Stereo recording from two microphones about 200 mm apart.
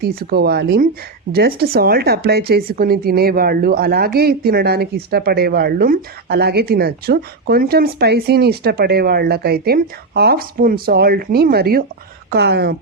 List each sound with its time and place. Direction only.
0.0 s speech: 50° right (ahead or behind)